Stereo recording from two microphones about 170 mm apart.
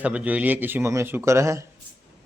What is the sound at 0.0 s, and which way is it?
Speech, 10° right (ahead or behind).